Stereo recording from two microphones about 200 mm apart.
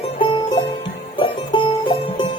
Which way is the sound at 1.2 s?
25° left (ahead or behind).